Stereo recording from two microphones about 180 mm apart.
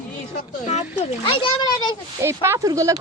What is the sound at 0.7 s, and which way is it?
A child's voice, 35° left (ahead or behind).